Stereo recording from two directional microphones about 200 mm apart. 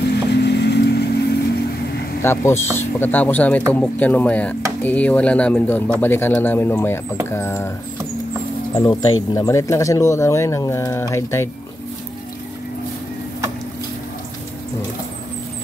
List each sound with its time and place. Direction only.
0.1 s vehicle: 55° left (ahead or behind)
2.2 s speech: 10° left (ahead or behind)
8.7 s speech: 20° left (ahead or behind)